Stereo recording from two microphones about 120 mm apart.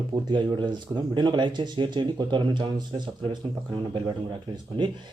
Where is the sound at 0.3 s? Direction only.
40° right (ahead or behind).